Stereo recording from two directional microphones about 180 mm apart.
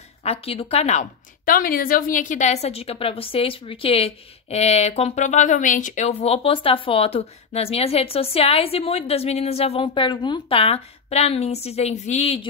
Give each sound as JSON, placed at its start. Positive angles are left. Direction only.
{"t": 0.2, "sound": "a woman's voice", "side_deg": 35}